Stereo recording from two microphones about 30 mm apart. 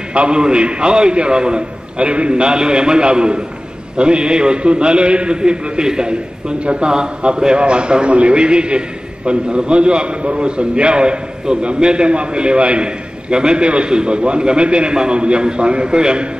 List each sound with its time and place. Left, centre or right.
0.3 s a man's voice: right